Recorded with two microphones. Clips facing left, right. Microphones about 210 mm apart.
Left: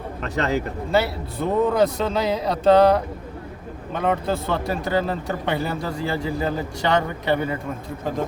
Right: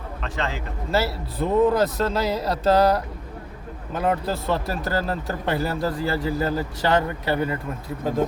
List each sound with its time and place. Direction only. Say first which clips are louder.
0.2 s speech: left 6 dB; 40° left (ahead or behind)
0.9 s speech: left 1 dB; centre (ahead or behind)